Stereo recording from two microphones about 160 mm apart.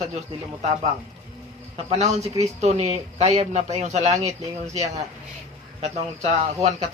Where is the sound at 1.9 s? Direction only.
40° right (ahead or behind).